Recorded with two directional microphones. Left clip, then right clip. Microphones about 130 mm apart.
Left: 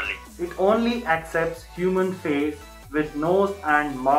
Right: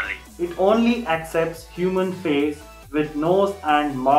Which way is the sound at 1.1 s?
20° right (ahead or behind).